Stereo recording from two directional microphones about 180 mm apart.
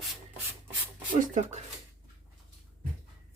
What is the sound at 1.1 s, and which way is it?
Speech, 45° right (ahead or behind).